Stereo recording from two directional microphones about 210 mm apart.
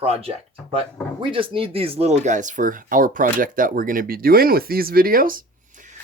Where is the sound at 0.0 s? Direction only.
25° right (ahead or behind).